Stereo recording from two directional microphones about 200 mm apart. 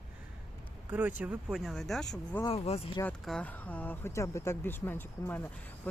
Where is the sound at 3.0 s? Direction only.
5° left (ahead or behind).